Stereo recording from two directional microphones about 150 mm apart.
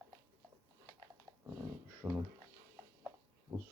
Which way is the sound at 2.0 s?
15° right (ahead or behind).